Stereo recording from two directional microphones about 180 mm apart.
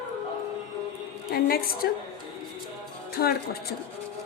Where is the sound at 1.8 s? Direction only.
60° left (ahead or behind).